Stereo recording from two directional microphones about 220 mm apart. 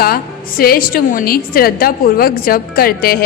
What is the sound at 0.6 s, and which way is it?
A woman's voice, 40° left (ahead or behind).